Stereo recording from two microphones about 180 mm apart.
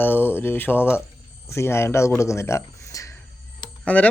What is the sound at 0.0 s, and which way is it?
Speech, 10° left (ahead or behind).